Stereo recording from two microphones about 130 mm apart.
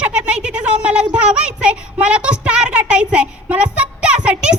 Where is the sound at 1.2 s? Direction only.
10° right (ahead or behind).